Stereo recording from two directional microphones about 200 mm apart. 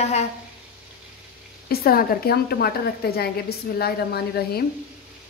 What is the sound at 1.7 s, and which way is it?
A woman's voice, 50° left (ahead or behind).